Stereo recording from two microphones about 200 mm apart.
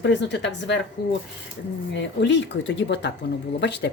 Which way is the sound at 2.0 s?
60° left (ahead or behind).